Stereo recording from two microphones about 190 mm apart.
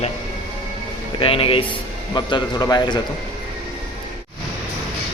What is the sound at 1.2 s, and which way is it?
A man's voice, 30° left (ahead or behind).